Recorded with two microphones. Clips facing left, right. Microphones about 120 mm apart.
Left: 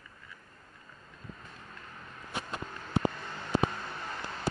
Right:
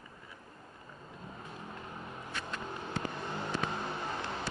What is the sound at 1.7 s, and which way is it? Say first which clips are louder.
Vehicle: right 5 dB; 20° right (ahead or behind).